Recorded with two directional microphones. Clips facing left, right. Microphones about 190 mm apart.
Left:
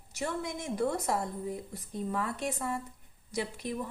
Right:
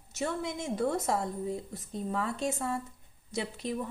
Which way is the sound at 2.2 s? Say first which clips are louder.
Right 2 dB; 25° right (ahead or behind).